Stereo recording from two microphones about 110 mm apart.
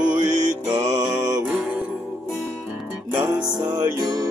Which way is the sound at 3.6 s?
40° right (ahead or behind).